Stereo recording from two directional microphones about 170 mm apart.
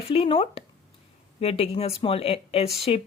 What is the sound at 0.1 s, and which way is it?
Speech, 35° left (ahead or behind).